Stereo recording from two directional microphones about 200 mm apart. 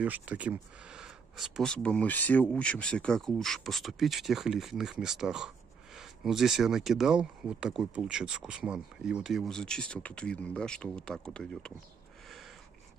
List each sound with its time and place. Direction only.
0.0 s speech: 5° right (ahead or behind)